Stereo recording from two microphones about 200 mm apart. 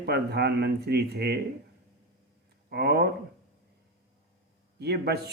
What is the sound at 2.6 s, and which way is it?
Speech, 50° right (ahead or behind).